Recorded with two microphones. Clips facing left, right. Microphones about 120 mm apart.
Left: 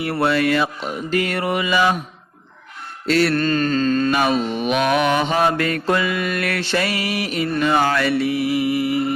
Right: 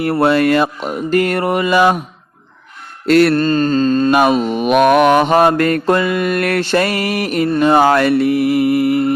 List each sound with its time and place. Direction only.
0.0 s mantra: 50° right (ahead or behind)
3.1 s mantra: 55° right (ahead or behind)
3.3 s mantra: 35° right (ahead or behind)
4.1 s mantra: 55° right (ahead or behind)